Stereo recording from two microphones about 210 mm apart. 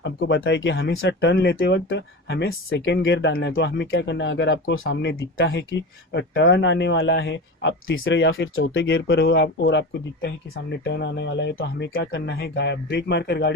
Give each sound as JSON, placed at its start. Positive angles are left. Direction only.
{"t": 0.0, "sound": "speech", "side_deg": 55}